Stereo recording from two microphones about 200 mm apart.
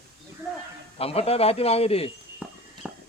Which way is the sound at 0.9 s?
30° left (ahead or behind).